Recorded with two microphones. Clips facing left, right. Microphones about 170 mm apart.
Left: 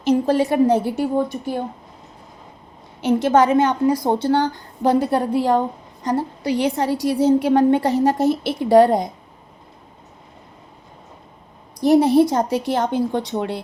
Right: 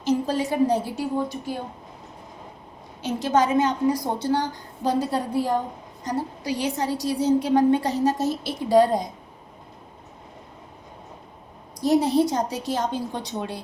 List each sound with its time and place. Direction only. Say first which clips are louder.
0.0 s a woman's voice: left 6 dB; 65° left (ahead or behind)
3.0 s a woman's voice: left 6 dB; 60° left (ahead or behind)
11.8 s a woman's voice: left 6 dB; 60° left (ahead or behind)